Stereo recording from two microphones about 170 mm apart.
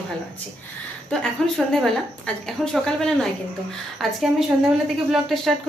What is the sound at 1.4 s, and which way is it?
A woman's voice, 5° left (ahead or behind).